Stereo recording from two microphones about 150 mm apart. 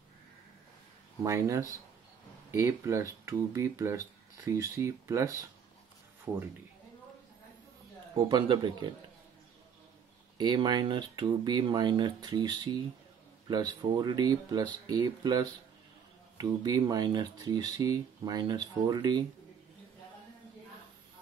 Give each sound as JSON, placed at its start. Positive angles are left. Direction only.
{"t": 1.2, "sound": "speech", "side_deg": -20}
{"t": 8.2, "sound": "speech", "side_deg": -30}
{"t": 10.3, "sound": "speech", "side_deg": -30}